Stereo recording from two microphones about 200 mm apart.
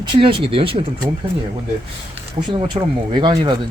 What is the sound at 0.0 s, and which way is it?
Speech, 25° right (ahead or behind).